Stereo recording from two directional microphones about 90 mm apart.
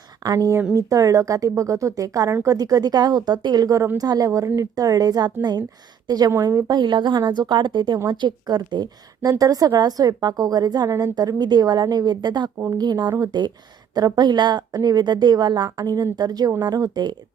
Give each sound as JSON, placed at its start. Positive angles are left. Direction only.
{"t": 0.2, "sound": "a woman's voice", "side_deg": -45}